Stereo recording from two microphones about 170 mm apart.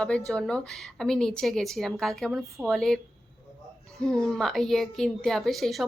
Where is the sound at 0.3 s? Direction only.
5° left (ahead or behind).